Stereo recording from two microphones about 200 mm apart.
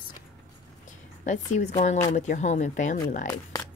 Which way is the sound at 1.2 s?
40° left (ahead or behind).